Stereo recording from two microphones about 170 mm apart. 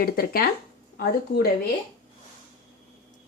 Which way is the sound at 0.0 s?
60° left (ahead or behind).